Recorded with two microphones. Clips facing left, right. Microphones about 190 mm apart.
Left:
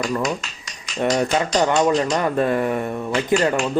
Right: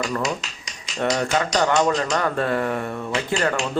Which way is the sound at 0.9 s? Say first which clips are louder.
Left 2 dB; 20° left (ahead or behind).